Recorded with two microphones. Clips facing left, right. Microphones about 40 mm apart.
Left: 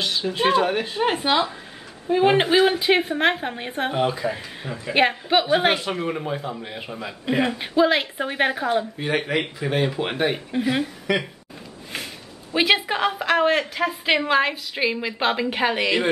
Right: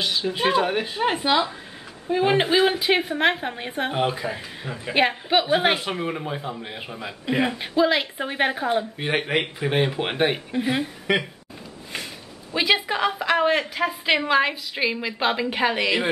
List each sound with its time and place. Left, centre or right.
0.0 s a woman's voice: centre
3.9 s a woman's voice: centre
8.9 s speech: centre
12.7 s a woman's voice: centre